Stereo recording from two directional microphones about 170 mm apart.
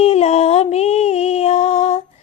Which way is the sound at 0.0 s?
40° left (ahead or behind).